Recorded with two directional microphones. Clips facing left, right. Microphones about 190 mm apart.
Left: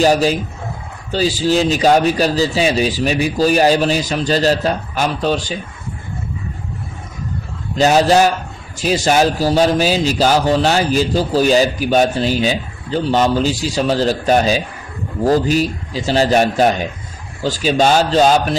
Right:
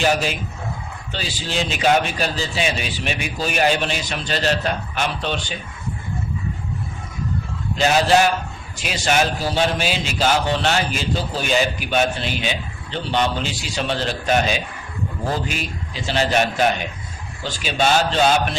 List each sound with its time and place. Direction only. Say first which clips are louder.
0.0 s a man's voice: left 7 dB; 35° left (ahead or behind)
7.7 s a man's voice: left 5 dB; 40° left (ahead or behind)